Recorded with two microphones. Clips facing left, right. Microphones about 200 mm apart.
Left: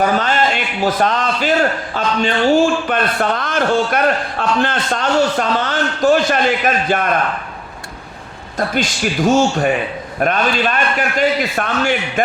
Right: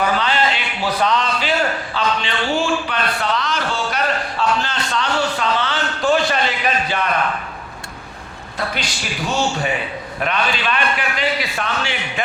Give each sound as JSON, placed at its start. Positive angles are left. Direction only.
{"t": 0.0, "sound": "a man's voice", "side_deg": 45}
{"t": 8.5, "sound": "a man's voice", "side_deg": 45}